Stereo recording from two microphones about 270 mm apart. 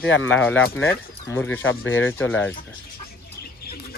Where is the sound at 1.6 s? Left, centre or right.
Left.